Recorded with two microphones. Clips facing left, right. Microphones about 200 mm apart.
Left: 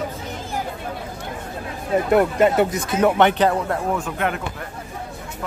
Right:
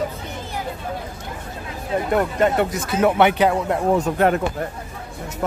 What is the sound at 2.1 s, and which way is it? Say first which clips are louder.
Speech: left 3 dB; 10° left (ahead or behind).